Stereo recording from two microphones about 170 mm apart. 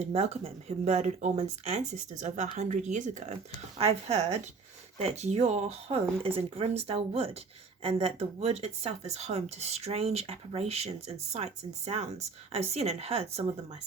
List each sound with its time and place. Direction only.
0.0 s speech: 40° right (ahead or behind)